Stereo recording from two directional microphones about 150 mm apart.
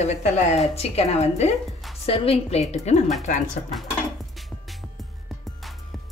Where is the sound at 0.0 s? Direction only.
45° left (ahead or behind).